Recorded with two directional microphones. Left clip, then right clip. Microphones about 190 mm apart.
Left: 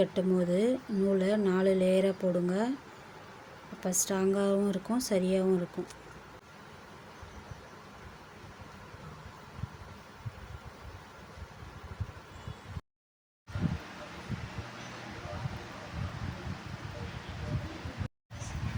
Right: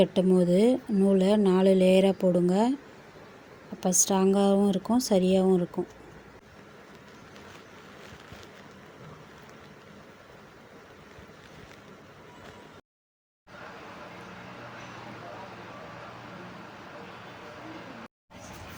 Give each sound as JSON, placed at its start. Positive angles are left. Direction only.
{"t": 0.0, "sound": "speech", "side_deg": -30}
{"t": 3.8, "sound": "speech", "side_deg": -25}